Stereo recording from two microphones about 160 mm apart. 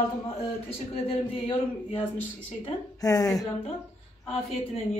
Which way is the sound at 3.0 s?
20° left (ahead or behind).